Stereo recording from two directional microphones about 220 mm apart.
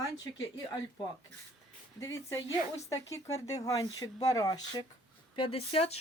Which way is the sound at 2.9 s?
15° left (ahead or behind).